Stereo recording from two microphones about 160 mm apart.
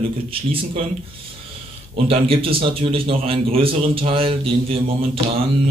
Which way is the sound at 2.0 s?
35° right (ahead or behind).